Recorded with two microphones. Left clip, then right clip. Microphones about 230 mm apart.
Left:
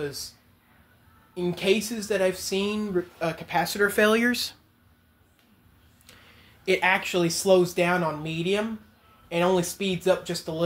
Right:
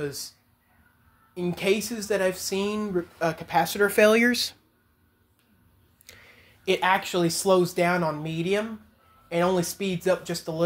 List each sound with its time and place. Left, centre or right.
1.3 s speech: right; by 4.6 s centre
6.0 s speech: centre